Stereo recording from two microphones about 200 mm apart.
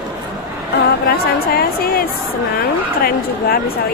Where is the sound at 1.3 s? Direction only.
50° left (ahead or behind).